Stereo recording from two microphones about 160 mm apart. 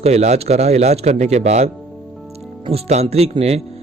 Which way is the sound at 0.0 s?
40° right (ahead or behind).